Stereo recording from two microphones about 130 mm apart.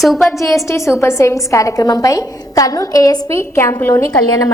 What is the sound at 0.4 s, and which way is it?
A woman's voice, 25° left (ahead or behind).